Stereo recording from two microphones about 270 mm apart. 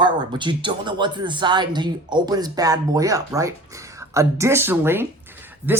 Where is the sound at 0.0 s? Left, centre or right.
Centre.